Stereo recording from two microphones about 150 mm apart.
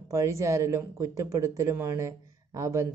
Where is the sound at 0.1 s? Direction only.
20° right (ahead or behind).